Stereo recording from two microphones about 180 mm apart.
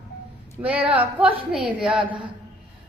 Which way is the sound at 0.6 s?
10° right (ahead or behind).